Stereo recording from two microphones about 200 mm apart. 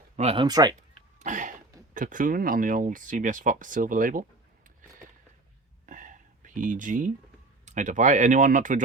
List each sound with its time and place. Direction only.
0.2 s speech: 30° right (ahead or behind)
1.2 s cough: 40° right (ahead or behind)
1.9 s speech: 40° right (ahead or behind)
5.8 s whispering: 40° right (ahead or behind)
7.6 s speech: 40° right (ahead or behind)